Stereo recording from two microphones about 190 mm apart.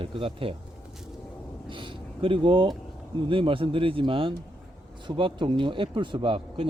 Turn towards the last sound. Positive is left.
turn(degrees=-25)  # may be behind; listen again after turning